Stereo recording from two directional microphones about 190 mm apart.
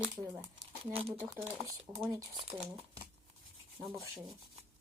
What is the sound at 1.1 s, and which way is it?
Speech, 10° right (ahead or behind).